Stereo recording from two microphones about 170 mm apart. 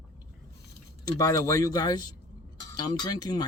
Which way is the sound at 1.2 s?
20° left (ahead or behind).